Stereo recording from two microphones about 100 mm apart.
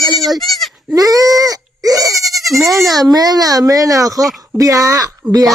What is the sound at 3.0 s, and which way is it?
Speech, 40° right (ahead or behind).